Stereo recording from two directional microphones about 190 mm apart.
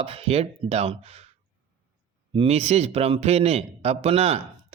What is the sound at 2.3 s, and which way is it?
Speech, 30° right (ahead or behind).